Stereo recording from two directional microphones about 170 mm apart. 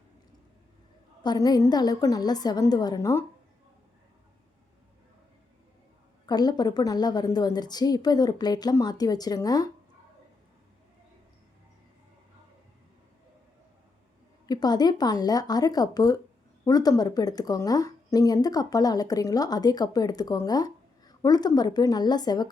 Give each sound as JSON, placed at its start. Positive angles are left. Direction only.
{"t": 1.2, "sound": "speech", "side_deg": 25}
{"t": 6.2, "sound": "speech", "side_deg": 25}
{"t": 14.4, "sound": "speech", "side_deg": 25}